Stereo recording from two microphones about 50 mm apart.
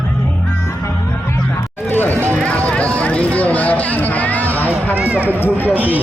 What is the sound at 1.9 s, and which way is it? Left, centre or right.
Music, left.